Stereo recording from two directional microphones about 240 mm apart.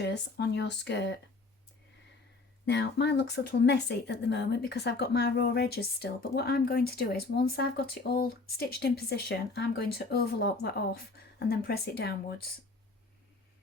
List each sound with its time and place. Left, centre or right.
0.0 s speech: left
2.6 s speech: left